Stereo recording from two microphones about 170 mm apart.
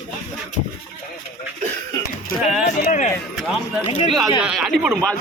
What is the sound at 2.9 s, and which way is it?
Speech, 45° left (ahead or behind).